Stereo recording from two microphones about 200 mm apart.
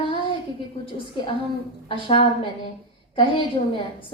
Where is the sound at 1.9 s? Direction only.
25° left (ahead or behind).